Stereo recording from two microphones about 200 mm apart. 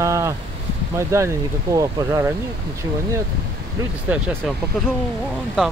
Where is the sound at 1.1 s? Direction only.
15° right (ahead or behind).